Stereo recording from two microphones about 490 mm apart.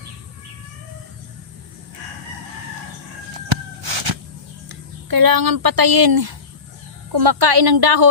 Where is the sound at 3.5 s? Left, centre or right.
Right.